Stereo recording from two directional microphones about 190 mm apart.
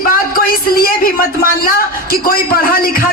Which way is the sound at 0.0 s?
50° left (ahead or behind).